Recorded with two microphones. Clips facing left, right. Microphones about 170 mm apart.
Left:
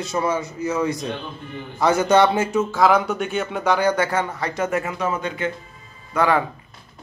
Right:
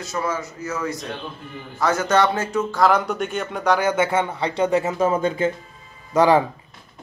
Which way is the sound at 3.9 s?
20° right (ahead or behind).